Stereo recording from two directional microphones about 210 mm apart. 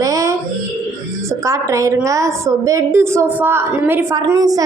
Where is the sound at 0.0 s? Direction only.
15° right (ahead or behind).